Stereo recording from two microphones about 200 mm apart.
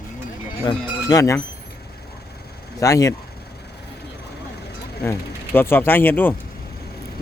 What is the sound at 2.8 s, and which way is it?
Speech, 15° left (ahead or behind).